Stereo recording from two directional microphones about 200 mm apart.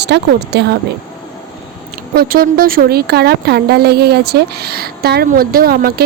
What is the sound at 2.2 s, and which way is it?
A woman's voice, 45° right (ahead or behind).